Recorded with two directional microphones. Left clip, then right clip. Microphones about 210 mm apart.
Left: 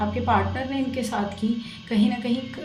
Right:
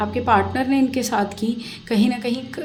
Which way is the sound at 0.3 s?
40° right (ahead or behind).